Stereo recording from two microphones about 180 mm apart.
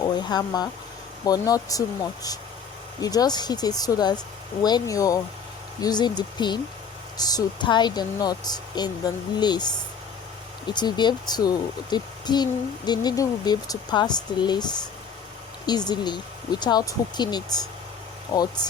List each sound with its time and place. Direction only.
0.0 s speech: 25° left (ahead or behind)
3.0 s speech: 20° left (ahead or behind)